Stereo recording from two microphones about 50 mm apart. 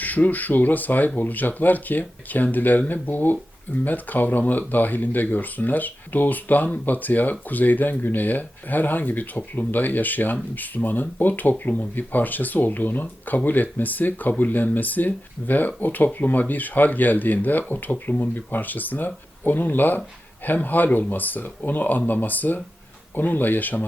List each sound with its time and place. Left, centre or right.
0.0 s speech: left